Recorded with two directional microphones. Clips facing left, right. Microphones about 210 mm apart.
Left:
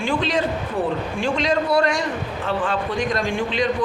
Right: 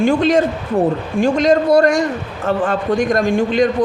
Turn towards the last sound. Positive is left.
turn(degrees=-45)  # may be behind; listen again after turning